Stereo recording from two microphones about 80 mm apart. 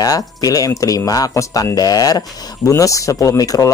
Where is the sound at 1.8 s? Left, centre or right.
Left.